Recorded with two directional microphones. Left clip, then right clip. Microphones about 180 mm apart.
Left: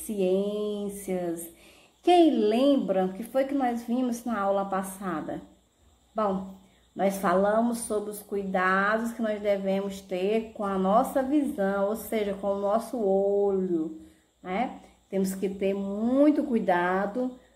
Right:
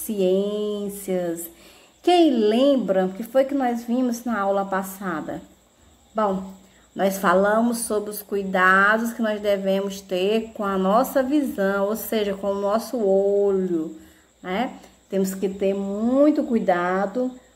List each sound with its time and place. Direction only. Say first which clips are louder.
0.1 s speech: right 5 dB; 15° right (ahead or behind)
7.0 s speech: right 5 dB; 15° right (ahead or behind)